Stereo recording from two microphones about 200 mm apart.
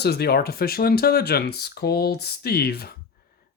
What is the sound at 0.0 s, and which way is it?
Speech, 55° left (ahead or behind).